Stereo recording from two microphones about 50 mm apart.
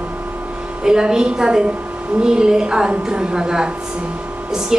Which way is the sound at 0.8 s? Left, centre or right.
Centre.